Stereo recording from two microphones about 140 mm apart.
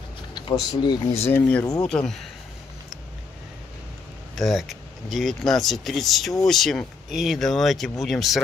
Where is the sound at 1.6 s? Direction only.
25° left (ahead or behind).